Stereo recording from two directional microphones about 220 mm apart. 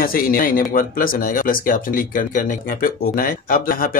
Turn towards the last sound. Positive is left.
turn(degrees=40)  # may be behind; listen again after turning